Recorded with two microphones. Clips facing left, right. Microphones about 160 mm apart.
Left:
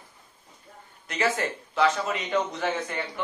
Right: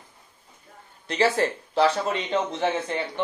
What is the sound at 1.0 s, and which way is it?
A man's voice, 30° right (ahead or behind).